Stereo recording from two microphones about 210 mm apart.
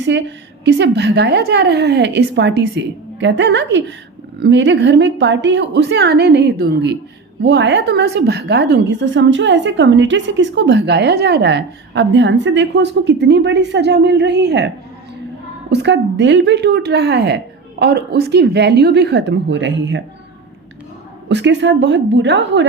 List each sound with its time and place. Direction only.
0.0 s a woman's voice: 55° right (ahead or behind)
15.7 s speech: 55° right (ahead or behind)
21.2 s a woman's voice: 55° right (ahead or behind)